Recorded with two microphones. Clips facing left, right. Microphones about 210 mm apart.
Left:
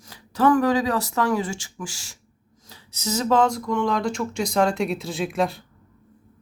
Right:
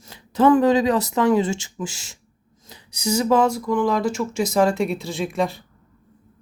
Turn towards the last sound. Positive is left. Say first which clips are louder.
# right 1 dB
turn(degrees=0)  # may be behind; listen again after turning